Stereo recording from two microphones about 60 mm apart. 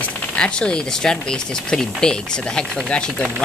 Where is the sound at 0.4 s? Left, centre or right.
Centre.